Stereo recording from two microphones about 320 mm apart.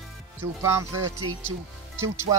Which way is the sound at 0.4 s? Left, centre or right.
Centre.